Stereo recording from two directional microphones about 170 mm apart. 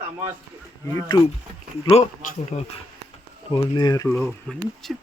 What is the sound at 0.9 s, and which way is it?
Speech, 20° left (ahead or behind).